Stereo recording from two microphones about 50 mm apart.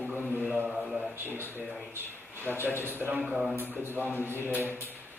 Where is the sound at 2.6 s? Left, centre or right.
Right.